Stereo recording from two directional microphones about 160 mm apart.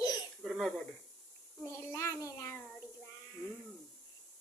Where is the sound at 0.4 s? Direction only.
Centre (ahead or behind).